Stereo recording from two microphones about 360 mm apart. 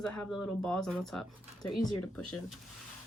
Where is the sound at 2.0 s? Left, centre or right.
Left.